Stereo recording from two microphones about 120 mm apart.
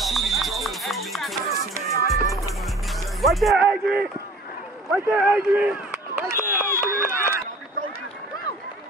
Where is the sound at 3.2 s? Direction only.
Centre (ahead or behind).